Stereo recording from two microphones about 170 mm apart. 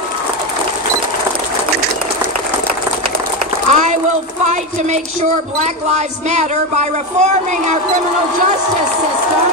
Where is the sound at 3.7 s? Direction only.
45° right (ahead or behind).